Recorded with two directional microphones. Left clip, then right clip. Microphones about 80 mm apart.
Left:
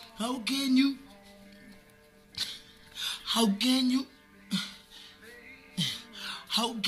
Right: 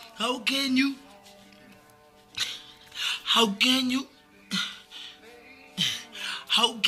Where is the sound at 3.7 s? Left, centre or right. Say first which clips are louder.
Right 3 dB; left.